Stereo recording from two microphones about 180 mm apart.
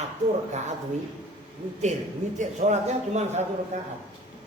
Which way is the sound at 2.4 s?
45° right (ahead or behind).